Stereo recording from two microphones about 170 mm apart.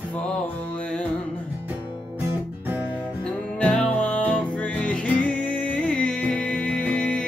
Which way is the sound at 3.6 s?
5° left (ahead or behind).